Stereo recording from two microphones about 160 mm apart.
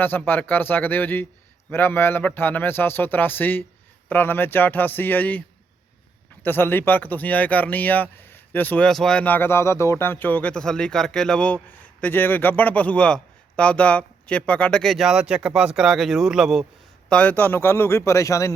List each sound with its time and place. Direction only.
0.0 s speech: 10° left (ahead or behind)
6.4 s speech: 15° left (ahead or behind)
17.1 s speech: 10° left (ahead or behind)